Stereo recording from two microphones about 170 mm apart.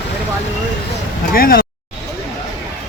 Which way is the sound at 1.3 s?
60° left (ahead or behind).